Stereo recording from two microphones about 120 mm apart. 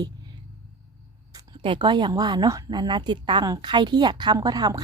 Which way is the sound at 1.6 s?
45° right (ahead or behind).